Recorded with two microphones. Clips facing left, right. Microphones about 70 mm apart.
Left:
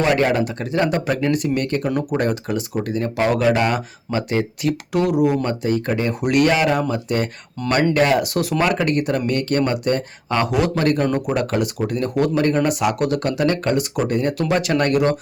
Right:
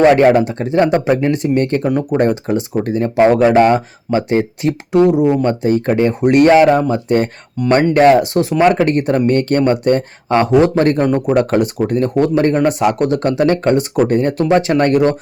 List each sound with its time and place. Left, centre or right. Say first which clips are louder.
0.0 s speech: right 8 dB; right
7.6 s speech: right 7 dB; centre
7.9 s speech: right 8 dB; right
11.0 s speech: right 6 dB; right
11.3 s speech: right 7 dB; right